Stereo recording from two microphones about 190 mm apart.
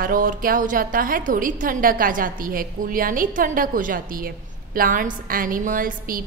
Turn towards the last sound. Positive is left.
turn(degrees=-45)  # may be behind; listen again after turning